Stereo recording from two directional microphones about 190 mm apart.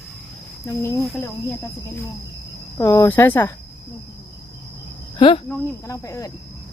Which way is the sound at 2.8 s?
15° left (ahead or behind).